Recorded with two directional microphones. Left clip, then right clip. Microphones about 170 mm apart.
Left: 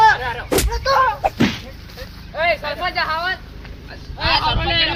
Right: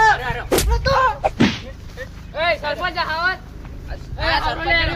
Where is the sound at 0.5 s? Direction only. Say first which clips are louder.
Left 1 dB; centre (ahead or behind).